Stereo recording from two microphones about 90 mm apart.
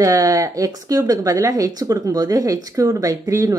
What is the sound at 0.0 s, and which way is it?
Speech, 40° right (ahead or behind).